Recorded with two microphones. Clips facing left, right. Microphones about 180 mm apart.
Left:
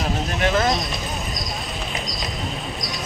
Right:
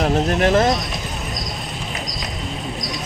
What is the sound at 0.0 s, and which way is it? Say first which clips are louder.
Speech: right 7 dB; 55° right (ahead or behind).